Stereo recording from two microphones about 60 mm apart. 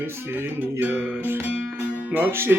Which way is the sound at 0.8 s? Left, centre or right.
Right.